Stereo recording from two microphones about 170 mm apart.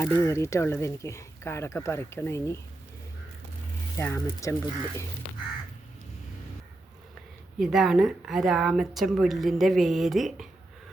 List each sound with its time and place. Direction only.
0.0 s speech: 15° left (ahead or behind)
3.9 s speech: 15° left (ahead or behind)
7.6 s a woman's voice: centre (ahead or behind)